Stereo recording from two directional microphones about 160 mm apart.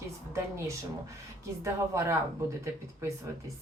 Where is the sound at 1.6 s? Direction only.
20° right (ahead or behind).